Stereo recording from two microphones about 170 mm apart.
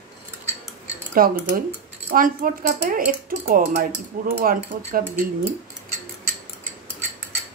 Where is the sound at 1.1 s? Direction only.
55° right (ahead or behind).